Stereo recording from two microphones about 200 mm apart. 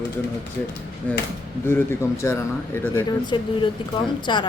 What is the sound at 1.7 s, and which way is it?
A man's voice, 10° left (ahead or behind).